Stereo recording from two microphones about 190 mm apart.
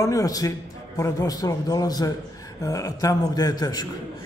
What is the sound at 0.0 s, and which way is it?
A man's voice, 15° left (ahead or behind).